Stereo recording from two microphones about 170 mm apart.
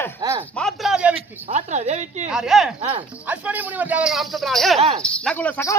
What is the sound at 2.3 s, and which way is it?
A man's voice, 5° right (ahead or behind).